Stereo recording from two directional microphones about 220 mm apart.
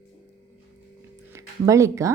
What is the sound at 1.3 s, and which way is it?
Speech, 15° right (ahead or behind).